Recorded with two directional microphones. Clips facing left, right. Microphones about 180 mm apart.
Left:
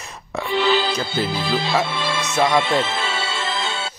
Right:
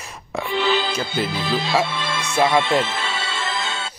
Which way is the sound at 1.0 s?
30° left (ahead or behind).